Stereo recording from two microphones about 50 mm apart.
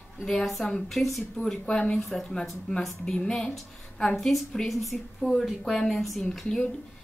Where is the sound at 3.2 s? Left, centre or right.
Centre.